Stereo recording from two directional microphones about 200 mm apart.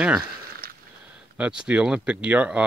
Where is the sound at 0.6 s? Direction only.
50° right (ahead or behind).